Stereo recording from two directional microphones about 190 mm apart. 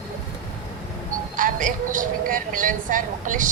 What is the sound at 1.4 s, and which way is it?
A woman's voice, 45° right (ahead or behind).